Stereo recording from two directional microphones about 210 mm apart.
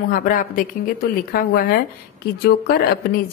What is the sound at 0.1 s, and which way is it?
A woman's voice, 40° left (ahead or behind).